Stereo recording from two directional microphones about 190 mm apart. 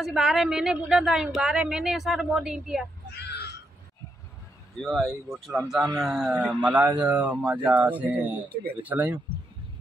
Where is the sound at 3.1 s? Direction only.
60° left (ahead or behind).